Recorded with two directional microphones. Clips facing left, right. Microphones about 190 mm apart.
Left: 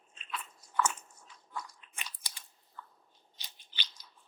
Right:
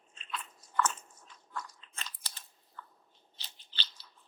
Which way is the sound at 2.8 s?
15° left (ahead or behind).